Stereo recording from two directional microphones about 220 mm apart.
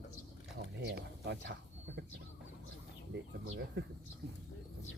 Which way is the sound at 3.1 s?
50° right (ahead or behind).